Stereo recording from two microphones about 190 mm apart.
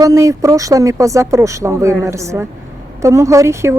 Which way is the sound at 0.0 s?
15° right (ahead or behind).